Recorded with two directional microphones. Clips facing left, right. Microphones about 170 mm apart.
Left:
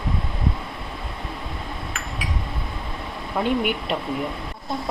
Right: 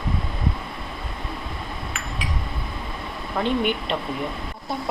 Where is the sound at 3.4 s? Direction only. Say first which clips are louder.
Even; 5° left (ahead or behind).